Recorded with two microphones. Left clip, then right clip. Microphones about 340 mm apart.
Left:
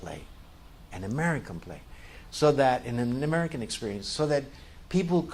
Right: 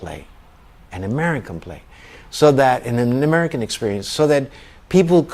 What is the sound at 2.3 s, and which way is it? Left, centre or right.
Speech, right.